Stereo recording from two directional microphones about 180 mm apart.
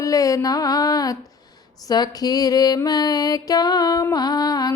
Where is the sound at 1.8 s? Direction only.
20° left (ahead or behind).